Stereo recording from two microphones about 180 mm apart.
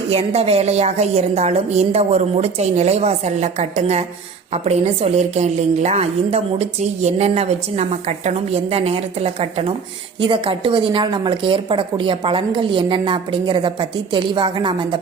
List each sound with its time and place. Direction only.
0.1 s a woman's voice: 35° right (ahead or behind)